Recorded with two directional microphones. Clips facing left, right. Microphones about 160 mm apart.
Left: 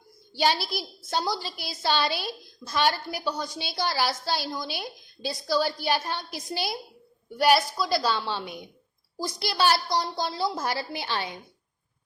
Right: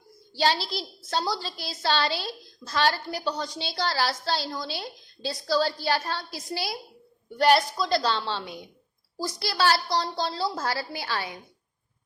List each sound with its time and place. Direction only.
0.3 s a woman's voice: 15° left (ahead or behind)
7.3 s a woman's voice: 10° left (ahead or behind)